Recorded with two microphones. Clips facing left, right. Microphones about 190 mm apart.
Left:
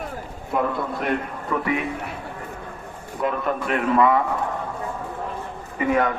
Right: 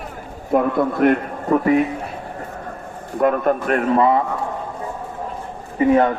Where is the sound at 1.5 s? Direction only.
40° right (ahead or behind).